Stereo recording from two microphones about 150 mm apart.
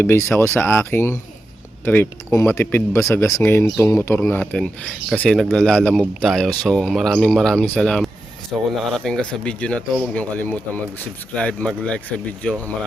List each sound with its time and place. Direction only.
0.0 s speech: 15° left (ahead or behind)